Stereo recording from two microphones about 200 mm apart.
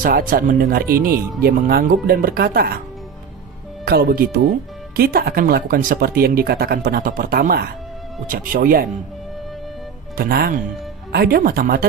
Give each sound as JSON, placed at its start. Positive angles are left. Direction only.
{"t": 0.0, "sound": "speech", "side_deg": -45}
{"t": 3.8, "sound": "speech", "side_deg": -50}
{"t": 10.2, "sound": "speech", "side_deg": -50}